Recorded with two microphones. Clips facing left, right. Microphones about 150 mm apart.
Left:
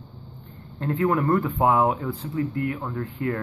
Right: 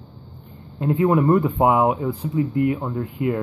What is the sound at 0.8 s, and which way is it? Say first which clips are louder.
Speech: right 5 dB; 15° right (ahead or behind).